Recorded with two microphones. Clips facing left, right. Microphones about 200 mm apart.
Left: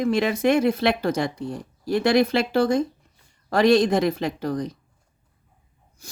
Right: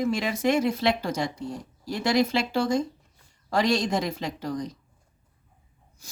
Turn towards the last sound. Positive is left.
turn(degrees=60)  # may be behind; listen again after turning